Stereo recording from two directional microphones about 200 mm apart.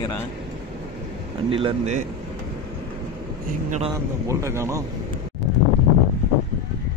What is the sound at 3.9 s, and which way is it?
Speech, 15° right (ahead or behind).